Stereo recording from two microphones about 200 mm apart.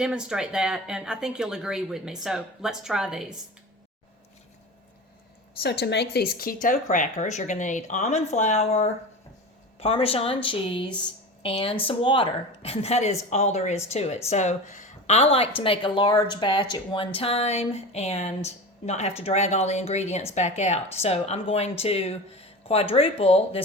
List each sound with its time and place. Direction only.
0.0 s speech: 5° right (ahead or behind)
5.6 s a woman's voice: 55° left (ahead or behind); by 23.6 s 30° left (ahead or behind)